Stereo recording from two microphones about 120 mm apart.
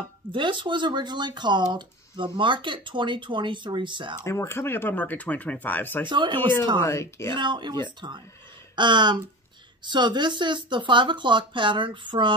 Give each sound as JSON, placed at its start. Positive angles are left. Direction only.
{"t": 0.3, "sound": "speech", "side_deg": -45}
{"t": 4.2, "sound": "speech", "side_deg": 25}
{"t": 6.0, "sound": "speech", "side_deg": -40}
{"t": 6.8, "sound": "speech", "side_deg": 25}
{"t": 7.3, "sound": "speech", "side_deg": -40}